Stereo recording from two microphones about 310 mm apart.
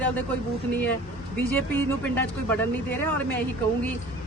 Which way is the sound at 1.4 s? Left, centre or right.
Centre.